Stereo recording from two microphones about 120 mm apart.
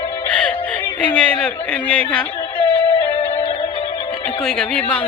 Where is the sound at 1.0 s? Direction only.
10° left (ahead or behind).